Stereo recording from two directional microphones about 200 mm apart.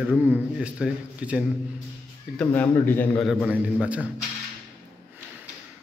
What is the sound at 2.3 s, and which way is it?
Speech, 5° left (ahead or behind).